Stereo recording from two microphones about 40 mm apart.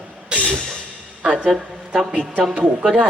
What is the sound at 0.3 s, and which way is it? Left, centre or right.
Music, right.